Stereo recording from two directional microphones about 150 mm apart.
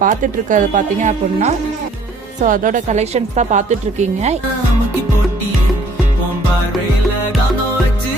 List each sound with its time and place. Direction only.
0.0 s speech: 60° right (ahead or behind)